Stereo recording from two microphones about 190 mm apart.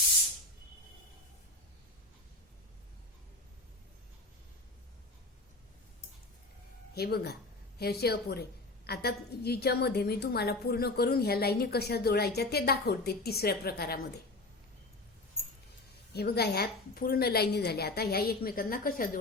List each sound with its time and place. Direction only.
6.9 s a woman's voice: 55° left (ahead or behind)
16.1 s a woman's voice: 55° left (ahead or behind)